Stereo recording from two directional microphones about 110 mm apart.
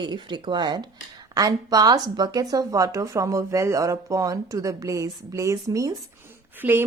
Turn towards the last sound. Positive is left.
turn(degrees=-15)  # may be behind; listen again after turning